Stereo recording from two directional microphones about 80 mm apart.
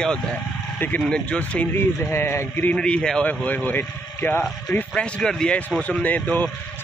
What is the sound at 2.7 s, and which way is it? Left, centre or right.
A man's voice, centre.